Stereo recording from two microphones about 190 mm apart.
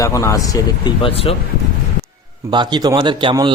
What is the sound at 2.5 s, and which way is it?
Speech, 25° right (ahead or behind).